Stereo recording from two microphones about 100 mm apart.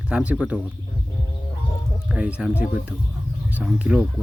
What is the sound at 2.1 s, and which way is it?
Speech, 10° right (ahead or behind).